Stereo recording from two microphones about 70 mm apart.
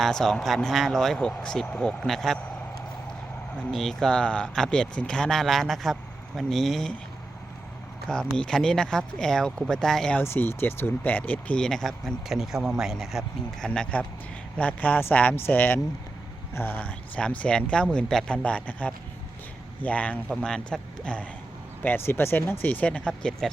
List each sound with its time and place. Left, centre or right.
0.0 s speech: centre
3.6 s speech: centre
8.0 s speech: centre
10.2 s speech: left
11.6 s speech: centre
13.6 s speech: centre
21.8 s speech: left; by 23.3 s centre